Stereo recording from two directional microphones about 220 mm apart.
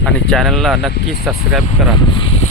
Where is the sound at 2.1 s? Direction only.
25° left (ahead or behind).